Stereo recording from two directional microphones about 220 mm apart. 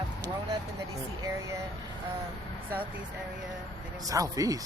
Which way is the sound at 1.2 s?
15° right (ahead or behind).